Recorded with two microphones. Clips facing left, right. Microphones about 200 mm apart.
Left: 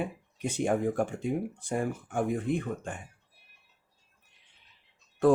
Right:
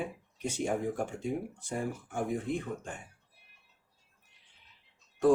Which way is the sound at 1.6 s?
55° left (ahead or behind).